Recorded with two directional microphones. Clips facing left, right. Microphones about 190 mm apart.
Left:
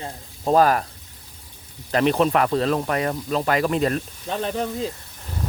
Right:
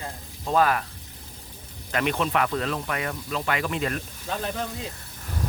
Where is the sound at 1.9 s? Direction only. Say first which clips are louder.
Left 7 dB; 35° left (ahead or behind).